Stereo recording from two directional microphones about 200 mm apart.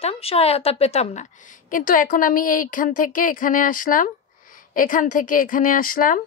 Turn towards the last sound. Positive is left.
turn(degrees=45)  # may be behind; listen again after turning